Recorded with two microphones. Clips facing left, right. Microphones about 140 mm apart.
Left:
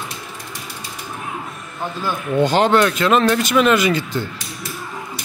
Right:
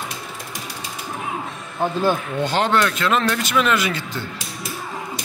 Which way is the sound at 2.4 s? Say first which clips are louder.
Left 4 dB; 15° left (ahead or behind).